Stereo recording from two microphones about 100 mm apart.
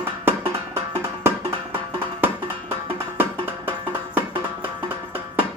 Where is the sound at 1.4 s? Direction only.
65° right (ahead or behind).